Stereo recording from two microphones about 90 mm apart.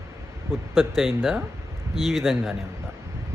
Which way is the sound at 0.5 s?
5° left (ahead or behind).